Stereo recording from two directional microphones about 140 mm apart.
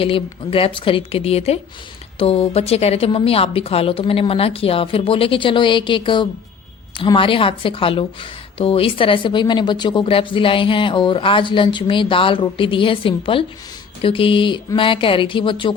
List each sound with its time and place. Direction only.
0.0 s a woman's voice: 40° left (ahead or behind)